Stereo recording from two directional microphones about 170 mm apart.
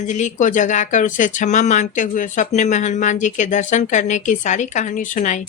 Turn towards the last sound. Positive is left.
turn(degrees=45)  # may be behind; listen again after turning